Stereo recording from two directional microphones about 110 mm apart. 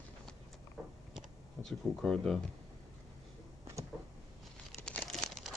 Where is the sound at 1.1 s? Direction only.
5° left (ahead or behind).